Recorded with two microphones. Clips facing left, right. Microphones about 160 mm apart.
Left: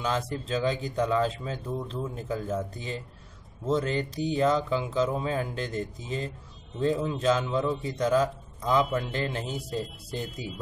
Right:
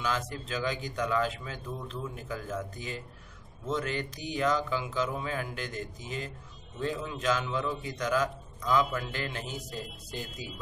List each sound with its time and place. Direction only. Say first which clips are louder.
0.0 s a man's voice: left 3 dB; 30° left (ahead or behind)